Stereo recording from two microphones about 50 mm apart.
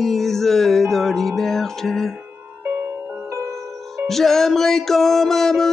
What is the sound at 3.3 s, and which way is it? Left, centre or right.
Music, right.